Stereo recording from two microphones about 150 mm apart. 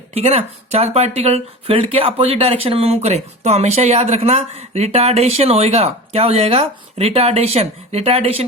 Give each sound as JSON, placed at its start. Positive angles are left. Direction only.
{"t": 0.1, "sound": "speech", "side_deg": -45}